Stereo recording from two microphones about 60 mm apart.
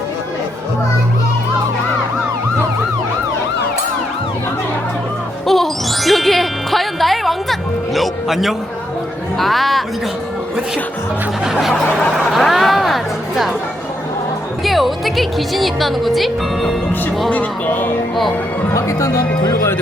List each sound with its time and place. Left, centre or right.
5.5 s music: centre
9.4 s speech: centre
11.4 s snicker: centre
12.1 s speech: centre
14.6 s speech: centre
17.2 s speech: left
18.7 s speech: left